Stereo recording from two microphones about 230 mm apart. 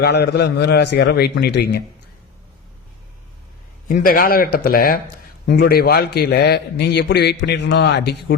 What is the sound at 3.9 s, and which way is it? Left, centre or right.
A man's voice, left.